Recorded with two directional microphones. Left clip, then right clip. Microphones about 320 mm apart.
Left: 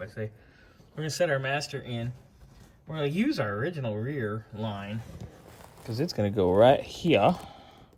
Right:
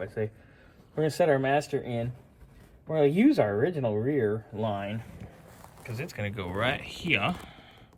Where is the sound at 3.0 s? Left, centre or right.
Centre.